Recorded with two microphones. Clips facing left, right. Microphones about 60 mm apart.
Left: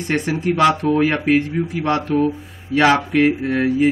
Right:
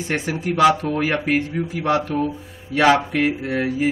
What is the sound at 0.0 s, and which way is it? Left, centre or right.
Speech, left.